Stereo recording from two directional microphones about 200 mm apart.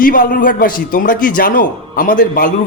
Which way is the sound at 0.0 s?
45° left (ahead or behind).